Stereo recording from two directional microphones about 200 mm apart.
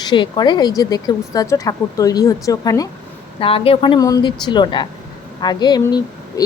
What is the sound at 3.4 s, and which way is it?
Speech, 30° left (ahead or behind).